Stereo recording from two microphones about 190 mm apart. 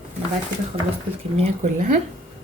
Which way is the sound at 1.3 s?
35° right (ahead or behind).